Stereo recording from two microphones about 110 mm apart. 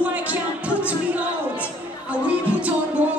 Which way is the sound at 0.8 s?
10° right (ahead or behind).